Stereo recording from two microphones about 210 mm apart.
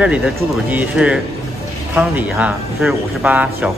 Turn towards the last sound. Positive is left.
turn(degrees=-5)  # may be behind; listen again after turning